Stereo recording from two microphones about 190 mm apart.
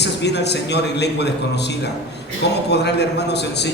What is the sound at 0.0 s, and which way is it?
A man's voice, 60° left (ahead or behind).